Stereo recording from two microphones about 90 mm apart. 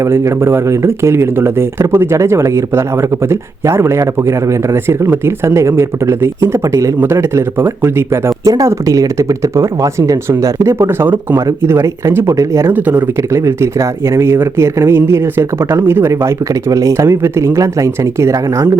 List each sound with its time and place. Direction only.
0.0 s speech: 30° right (ahead or behind)
8.4 s speech: 40° right (ahead or behind)
12.7 s speech: 20° right (ahead or behind)
13.3 s speech: 30° right (ahead or behind)